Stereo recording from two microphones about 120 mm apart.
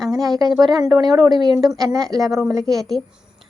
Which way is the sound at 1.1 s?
Centre (ahead or behind).